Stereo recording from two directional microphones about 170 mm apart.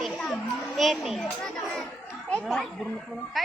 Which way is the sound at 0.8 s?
Centre (ahead or behind).